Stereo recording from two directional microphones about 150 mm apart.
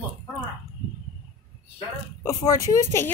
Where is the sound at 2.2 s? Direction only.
20° left (ahead or behind).